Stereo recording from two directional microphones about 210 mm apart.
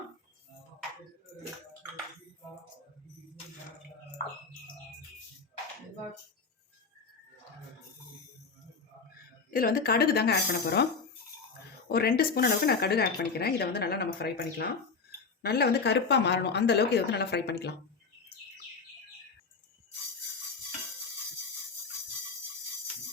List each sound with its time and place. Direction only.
9.5 s speech: 45° left (ahead or behind)
11.9 s speech: 45° left (ahead or behind)